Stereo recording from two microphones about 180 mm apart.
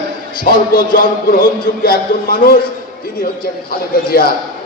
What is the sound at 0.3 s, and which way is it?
Music, 55° left (ahead or behind).